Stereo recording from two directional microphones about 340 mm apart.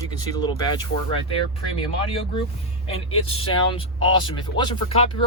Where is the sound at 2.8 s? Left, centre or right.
Centre.